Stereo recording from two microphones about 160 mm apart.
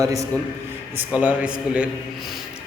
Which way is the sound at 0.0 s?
20° right (ahead or behind).